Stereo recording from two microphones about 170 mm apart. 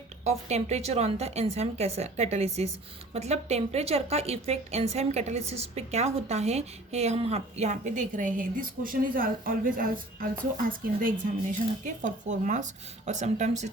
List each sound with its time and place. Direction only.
0.3 s a woman's voice: 40° right (ahead or behind)